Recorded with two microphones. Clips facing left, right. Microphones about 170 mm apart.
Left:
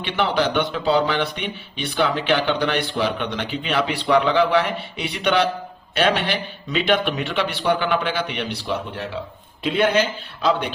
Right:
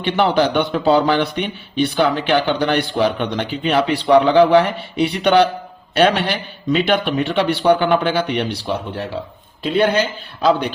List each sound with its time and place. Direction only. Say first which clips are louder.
0.0 s a man's voice: right 5 dB; 40° right (ahead or behind)